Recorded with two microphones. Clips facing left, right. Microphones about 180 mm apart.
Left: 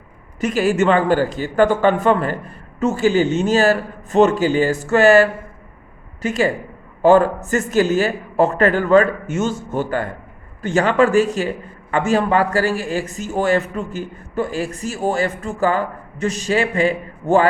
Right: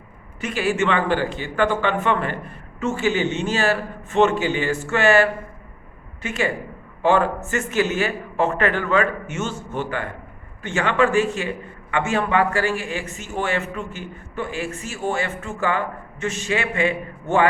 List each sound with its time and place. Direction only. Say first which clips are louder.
0.3 s a man's voice: left 5 dB; 40° left (ahead or behind)